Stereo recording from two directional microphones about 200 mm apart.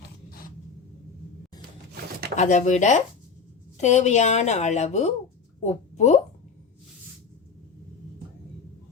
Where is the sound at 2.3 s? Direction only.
35° left (ahead or behind).